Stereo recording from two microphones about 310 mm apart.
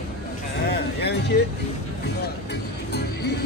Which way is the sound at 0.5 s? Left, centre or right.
Left.